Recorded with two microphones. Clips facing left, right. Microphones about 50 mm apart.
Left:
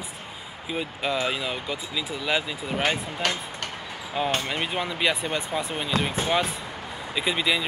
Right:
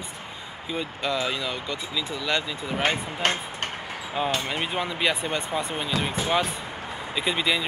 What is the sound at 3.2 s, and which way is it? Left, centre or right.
Speech, right.